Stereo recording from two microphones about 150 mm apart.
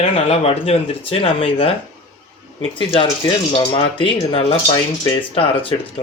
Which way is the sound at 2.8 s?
35° left (ahead or behind).